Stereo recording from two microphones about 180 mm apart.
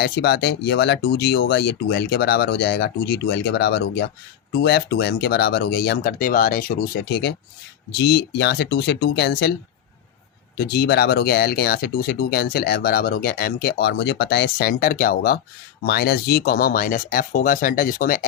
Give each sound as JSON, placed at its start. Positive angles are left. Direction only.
{"t": 0.0, "sound": "speech", "side_deg": 70}
{"t": 10.6, "sound": "speech", "side_deg": 65}